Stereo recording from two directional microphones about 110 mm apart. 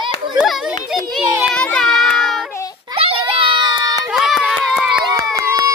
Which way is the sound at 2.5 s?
30° left (ahead or behind).